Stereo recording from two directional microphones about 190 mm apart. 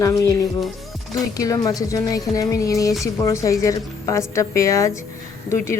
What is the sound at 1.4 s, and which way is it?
A woman's voice, 20° left (ahead or behind).